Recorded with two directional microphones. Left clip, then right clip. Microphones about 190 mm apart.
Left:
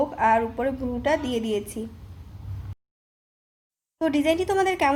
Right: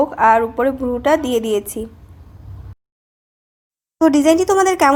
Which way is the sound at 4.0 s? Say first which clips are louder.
Right 10 dB; 30° right (ahead or behind).